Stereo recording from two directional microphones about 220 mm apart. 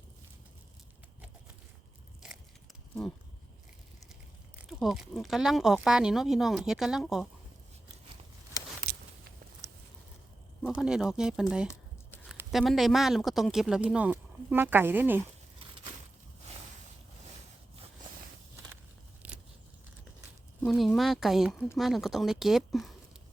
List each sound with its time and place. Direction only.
4.8 s speech: centre (ahead or behind)
8.9 s walk: 45° right (ahead or behind)
9.6 s a sound: 15° right (ahead or behind)
10.8 s speech: centre (ahead or behind)
19.2 s vehicle: 5° right (ahead or behind)
20.6 s speech: centre (ahead or behind)